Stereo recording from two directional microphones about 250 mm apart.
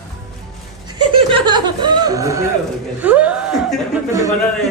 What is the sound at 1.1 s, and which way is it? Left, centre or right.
Chuckle, centre.